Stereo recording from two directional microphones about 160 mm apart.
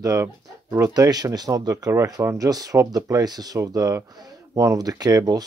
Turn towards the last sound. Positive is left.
turn(degrees=-25)  # may be behind; listen again after turning